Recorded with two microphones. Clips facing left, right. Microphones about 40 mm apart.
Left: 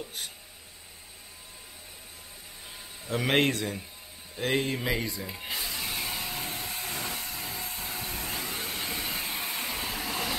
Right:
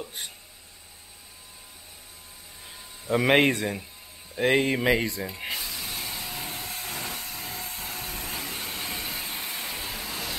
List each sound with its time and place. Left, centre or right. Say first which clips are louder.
0.0 s speech: right 1 dB; centre
3.1 s speech: right 5 dB; centre
5.0 s speech: right 5 dB; centre
5.5 s vehicle: even; centre